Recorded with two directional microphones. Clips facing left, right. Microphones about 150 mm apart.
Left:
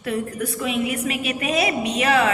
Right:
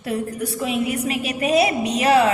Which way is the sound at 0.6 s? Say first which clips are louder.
Right 1 dB; 35° right (ahead or behind).